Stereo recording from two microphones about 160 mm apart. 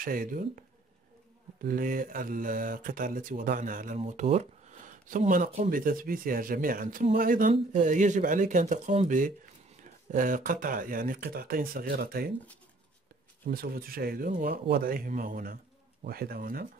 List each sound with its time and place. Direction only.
0.0 s speech: 60° right (ahead or behind)
4.0 s speech: 40° right (ahead or behind); by 12.3 s 70° right (ahead or behind)
13.5 s speech: 70° right (ahead or behind)